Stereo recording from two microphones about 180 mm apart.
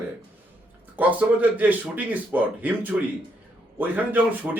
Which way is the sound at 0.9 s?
10° right (ahead or behind).